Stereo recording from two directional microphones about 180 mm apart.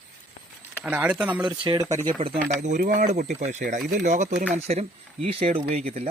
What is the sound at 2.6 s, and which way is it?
Speech, 45° right (ahead or behind).